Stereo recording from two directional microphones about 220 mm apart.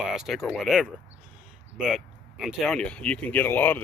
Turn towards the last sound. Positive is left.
turn(degrees=10)  # may be behind; listen again after turning